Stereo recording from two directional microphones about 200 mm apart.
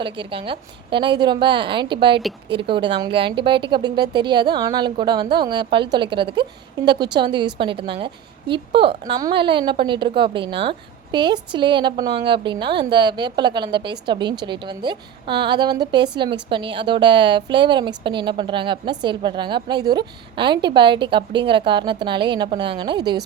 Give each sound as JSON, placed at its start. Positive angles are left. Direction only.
{"t": 0.0, "sound": "a woman's voice", "side_deg": -25}